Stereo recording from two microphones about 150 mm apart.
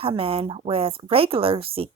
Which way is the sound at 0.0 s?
40° right (ahead or behind).